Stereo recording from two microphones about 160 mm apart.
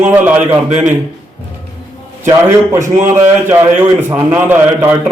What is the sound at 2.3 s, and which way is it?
A man's voice, 15° right (ahead or behind).